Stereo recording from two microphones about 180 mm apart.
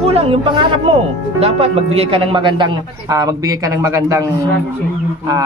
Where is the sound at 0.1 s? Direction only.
30° right (ahead or behind).